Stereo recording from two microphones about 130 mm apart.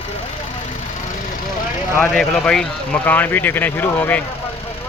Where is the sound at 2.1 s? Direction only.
5° left (ahead or behind).